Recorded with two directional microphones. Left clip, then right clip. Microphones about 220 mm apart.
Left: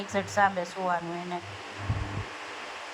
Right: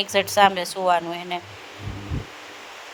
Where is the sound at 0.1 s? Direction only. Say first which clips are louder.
Right 7 dB; 55° right (ahead or behind).